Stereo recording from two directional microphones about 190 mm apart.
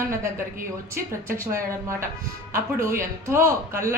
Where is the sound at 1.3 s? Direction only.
15° right (ahead or behind).